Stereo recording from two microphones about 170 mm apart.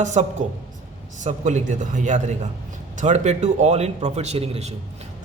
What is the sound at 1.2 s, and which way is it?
A man's voice, 45° right (ahead or behind).